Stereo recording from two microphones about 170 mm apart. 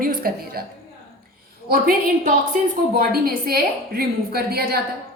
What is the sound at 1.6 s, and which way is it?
A woman's voice, 55° right (ahead or behind).